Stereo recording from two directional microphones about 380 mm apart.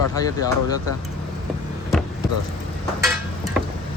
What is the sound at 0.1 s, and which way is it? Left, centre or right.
Speech, centre.